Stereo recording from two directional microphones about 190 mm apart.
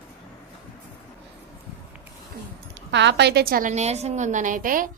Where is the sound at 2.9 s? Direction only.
65° right (ahead or behind).